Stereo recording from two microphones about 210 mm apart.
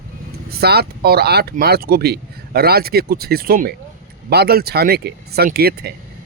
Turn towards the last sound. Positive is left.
turn(degrees=-50)  # may be behind; listen again after turning